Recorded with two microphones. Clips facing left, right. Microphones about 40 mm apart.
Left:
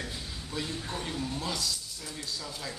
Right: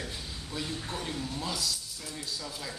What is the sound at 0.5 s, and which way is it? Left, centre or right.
Speech, centre.